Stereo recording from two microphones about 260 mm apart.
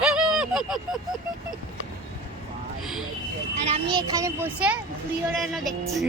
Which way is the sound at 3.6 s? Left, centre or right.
Right.